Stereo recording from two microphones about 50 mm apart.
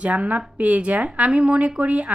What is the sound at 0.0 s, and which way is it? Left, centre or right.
Speech, right.